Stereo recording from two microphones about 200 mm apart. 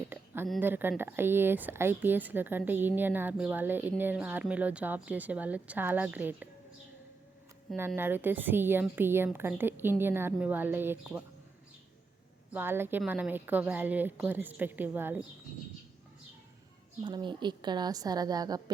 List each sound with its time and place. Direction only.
0.6 s speech: 10° right (ahead or behind)
7.8 s speech: 10° right (ahead or behind)
12.5 s speech: 10° right (ahead or behind)
17.0 s a woman's voice: 20° right (ahead or behind)